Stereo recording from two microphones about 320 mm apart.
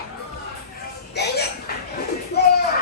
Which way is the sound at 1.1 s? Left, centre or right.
Left.